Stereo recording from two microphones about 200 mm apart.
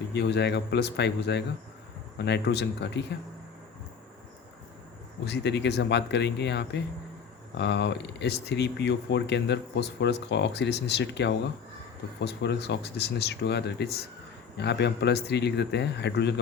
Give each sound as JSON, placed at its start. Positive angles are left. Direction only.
{"t": 0.1, "sound": "speech", "side_deg": 55}
{"t": 5.2, "sound": "speech", "side_deg": 60}